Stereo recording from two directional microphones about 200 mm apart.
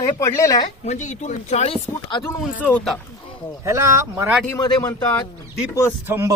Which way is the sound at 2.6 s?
5° left (ahead or behind).